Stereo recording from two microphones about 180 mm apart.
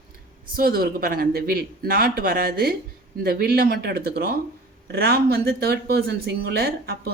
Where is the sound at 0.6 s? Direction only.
55° right (ahead or behind).